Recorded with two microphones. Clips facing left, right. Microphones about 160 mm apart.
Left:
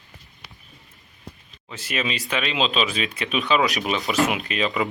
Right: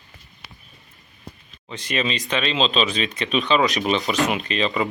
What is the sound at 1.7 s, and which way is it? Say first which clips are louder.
Speech: right 3 dB; 5° left (ahead or behind).